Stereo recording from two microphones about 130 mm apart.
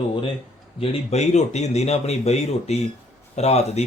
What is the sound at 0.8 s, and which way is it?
A man's voice, 55° left (ahead or behind).